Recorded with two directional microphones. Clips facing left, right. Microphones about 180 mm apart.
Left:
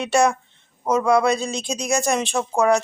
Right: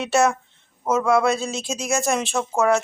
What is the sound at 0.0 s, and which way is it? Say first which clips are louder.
A woman's voice: left 1 dB; 5° right (ahead or behind).